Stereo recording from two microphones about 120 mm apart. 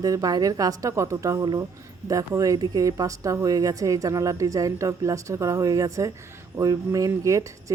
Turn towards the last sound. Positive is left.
turn(degrees=-25)  # may be behind; listen again after turning